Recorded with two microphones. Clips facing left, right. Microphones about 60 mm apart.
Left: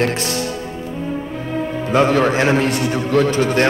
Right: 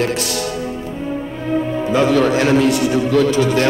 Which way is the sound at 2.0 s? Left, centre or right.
Left.